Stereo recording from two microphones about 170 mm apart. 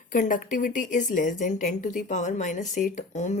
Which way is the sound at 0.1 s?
50° left (ahead or behind).